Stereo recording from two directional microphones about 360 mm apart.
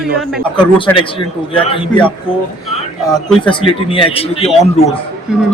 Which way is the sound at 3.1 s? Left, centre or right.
Centre.